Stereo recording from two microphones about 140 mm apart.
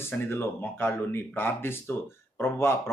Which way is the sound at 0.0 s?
15° left (ahead or behind).